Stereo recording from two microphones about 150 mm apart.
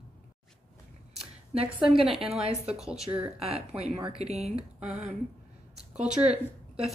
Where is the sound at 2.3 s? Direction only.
45° right (ahead or behind).